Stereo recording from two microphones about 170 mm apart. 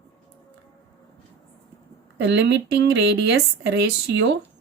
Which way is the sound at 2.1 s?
90° right.